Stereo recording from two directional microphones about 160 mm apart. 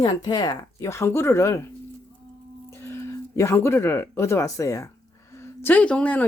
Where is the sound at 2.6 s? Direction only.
15° left (ahead or behind).